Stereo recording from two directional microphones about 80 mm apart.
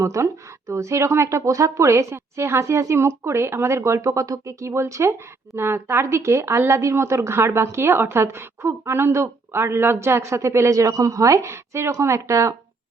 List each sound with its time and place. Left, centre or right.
0.0 s speech: right